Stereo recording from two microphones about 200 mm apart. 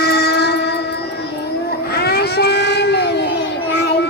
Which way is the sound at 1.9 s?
50° left (ahead or behind).